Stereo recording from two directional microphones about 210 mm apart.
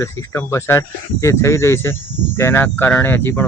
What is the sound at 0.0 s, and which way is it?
Speech, 10° left (ahead or behind).